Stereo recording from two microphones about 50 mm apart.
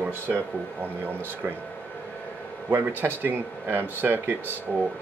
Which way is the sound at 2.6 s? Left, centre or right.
Right.